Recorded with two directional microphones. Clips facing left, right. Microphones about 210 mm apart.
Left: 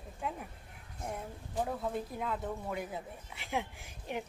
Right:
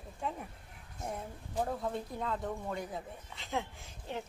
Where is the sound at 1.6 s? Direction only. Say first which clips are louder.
Even; centre (ahead or behind).